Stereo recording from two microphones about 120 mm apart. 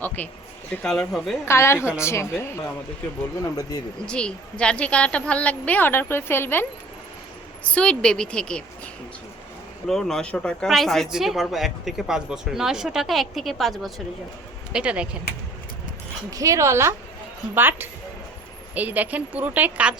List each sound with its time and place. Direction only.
0.2 s a woman's voice: 15° left (ahead or behind)
1.5 s a woman's voice: 20° left (ahead or behind)
4.0 s a woman's voice: 10° left (ahead or behind)
9.8 s a woman's voice: 5° left (ahead or behind)
16.3 s a woman's voice: 25° right (ahead or behind); by 20.0 s 10° right (ahead or behind)